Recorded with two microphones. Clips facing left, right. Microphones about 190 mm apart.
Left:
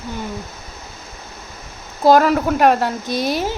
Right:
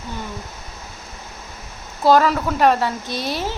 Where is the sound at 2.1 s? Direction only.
45° left (ahead or behind).